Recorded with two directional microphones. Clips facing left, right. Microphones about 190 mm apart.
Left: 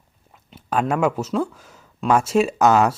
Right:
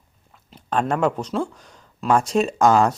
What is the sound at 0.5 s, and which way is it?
Speech, 5° left (ahead or behind).